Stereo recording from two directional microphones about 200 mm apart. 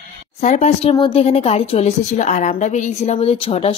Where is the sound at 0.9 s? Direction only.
25° left (ahead or behind).